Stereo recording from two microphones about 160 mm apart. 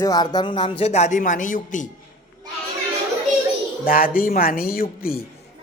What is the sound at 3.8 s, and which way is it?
Speech, 65° left (ahead or behind).